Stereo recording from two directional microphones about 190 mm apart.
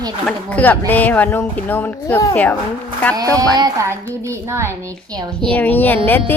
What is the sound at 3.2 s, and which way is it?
A woman's voice, 20° right (ahead or behind).